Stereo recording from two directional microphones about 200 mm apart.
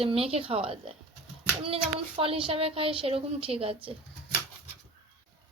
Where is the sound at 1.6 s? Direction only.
30° right (ahead or behind).